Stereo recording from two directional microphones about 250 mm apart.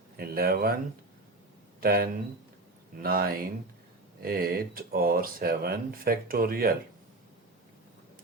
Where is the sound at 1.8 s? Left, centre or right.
Right.